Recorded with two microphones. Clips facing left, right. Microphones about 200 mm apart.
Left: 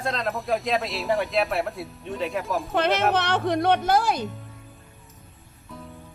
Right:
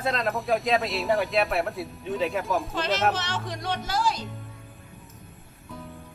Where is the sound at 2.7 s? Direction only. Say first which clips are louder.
Left 7 dB; 60° left (ahead or behind).